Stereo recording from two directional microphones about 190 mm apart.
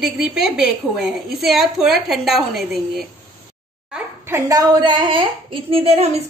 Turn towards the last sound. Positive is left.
turn(degrees=-35)  # may be behind; listen again after turning